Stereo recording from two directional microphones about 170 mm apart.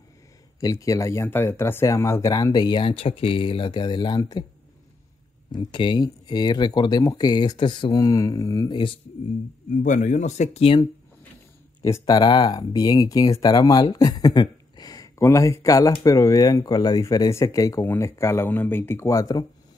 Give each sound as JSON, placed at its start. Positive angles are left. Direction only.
{"t": 0.6, "sound": "speech", "side_deg": 20}
{"t": 5.5, "sound": "speech", "side_deg": 30}
{"t": 9.8, "sound": "speech", "side_deg": 45}
{"t": 11.8, "sound": "speech", "side_deg": 20}